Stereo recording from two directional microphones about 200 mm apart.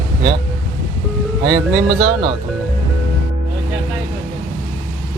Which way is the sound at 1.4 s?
60° right (ahead or behind).